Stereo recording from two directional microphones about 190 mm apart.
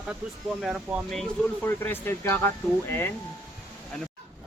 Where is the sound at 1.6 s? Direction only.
10° left (ahead or behind).